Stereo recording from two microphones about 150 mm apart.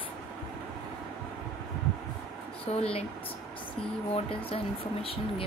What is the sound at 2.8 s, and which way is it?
Speech, 40° left (ahead or behind).